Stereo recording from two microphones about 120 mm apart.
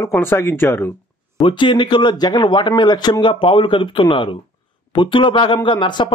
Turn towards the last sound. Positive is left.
turn(degrees=40)  # may be behind; listen again after turning